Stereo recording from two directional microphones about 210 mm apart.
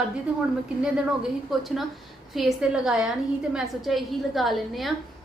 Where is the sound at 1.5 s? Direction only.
Centre (ahead or behind).